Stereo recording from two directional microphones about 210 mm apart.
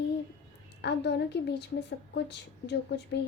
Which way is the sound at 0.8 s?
55° left (ahead or behind).